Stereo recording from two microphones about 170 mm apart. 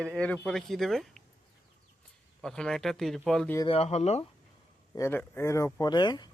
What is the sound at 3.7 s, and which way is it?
Speech, 40° left (ahead or behind).